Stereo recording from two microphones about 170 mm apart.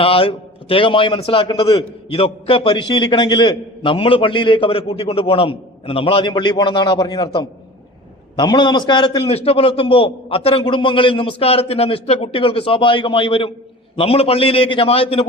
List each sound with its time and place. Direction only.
0.0 s a man's voice: 35° left (ahead or behind)
8.4 s a man's voice: 25° left (ahead or behind)